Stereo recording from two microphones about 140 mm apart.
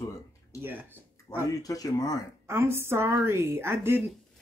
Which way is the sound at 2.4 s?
15° right (ahead or behind).